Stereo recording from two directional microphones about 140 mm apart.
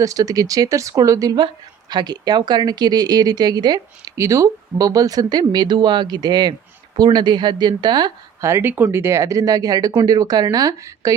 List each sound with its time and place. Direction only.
0.0 s a woman's voice: 25° right (ahead or behind)